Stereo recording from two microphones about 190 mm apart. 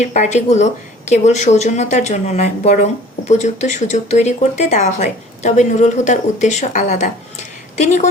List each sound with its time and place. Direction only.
0.0 s a woman's voice: 40° left (ahead or behind)